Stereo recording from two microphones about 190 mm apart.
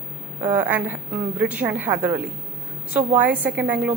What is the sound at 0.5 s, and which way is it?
A woman's voice, 10° right (ahead or behind).